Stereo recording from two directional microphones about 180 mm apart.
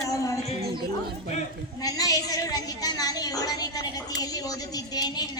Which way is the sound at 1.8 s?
20° left (ahead or behind).